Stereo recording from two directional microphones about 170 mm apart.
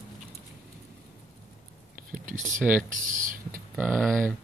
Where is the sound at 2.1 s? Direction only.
50° right (ahead or behind).